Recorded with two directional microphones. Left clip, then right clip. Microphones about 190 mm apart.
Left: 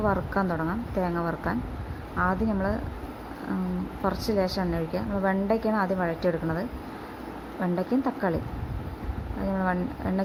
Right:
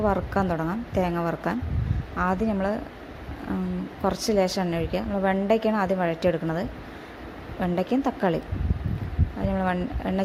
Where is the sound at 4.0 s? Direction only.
35° right (ahead or behind).